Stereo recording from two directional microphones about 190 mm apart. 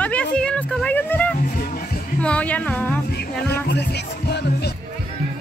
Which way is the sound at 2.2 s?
5° left (ahead or behind).